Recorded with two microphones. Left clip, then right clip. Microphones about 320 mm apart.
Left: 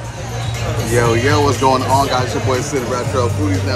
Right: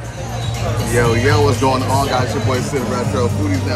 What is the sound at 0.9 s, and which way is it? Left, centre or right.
Speech, centre.